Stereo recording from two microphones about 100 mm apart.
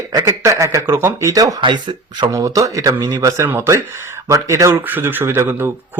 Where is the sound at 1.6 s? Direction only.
50° right (ahead or behind).